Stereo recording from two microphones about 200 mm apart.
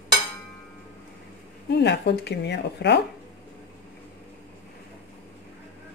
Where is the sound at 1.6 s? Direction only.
60° left (ahead or behind).